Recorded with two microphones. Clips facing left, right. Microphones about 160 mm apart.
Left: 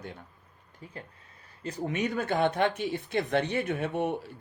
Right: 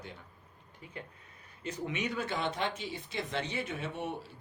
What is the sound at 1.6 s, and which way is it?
Speech, 45° left (ahead or behind).